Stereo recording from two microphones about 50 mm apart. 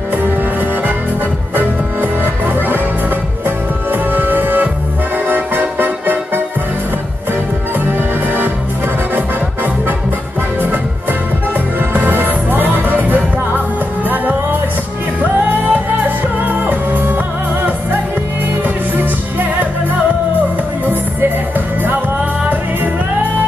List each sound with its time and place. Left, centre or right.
1.5 s music: right
10.6 s music: right
20.8 s music: right